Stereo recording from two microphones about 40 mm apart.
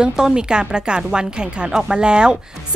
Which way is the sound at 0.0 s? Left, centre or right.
Centre.